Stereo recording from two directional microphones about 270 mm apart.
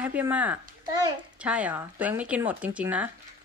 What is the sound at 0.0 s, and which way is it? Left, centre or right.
Speech, centre.